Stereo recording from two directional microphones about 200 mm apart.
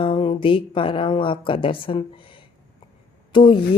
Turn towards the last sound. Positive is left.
turn(degrees=25)  # may be behind; listen again after turning